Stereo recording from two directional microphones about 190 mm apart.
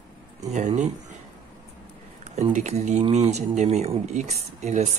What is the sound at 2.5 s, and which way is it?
Speech, 40° right (ahead or behind).